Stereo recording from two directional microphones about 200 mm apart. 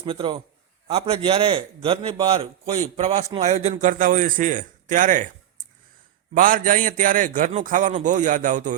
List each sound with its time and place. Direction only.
0.0 s a man's voice: 30° right (ahead or behind)
6.3 s a man's voice: 45° right (ahead or behind)